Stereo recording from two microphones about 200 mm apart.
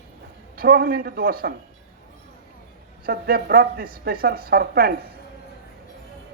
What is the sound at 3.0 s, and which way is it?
Speech, 50° right (ahead or behind).